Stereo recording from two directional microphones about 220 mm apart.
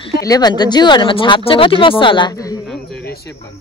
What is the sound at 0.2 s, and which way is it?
Speech, 15° left (ahead or behind).